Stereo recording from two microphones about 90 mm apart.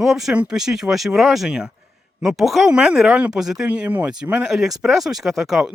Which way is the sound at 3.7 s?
20° right (ahead or behind).